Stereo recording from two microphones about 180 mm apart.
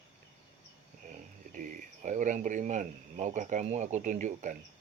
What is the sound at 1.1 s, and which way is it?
Speech, 45° right (ahead or behind).